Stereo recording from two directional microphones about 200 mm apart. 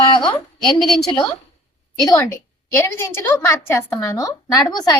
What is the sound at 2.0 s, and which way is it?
A woman's voice, 15° left (ahead or behind).